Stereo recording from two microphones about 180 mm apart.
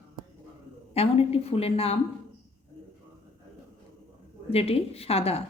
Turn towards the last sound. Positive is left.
turn(degrees=35)  # may be behind; listen again after turning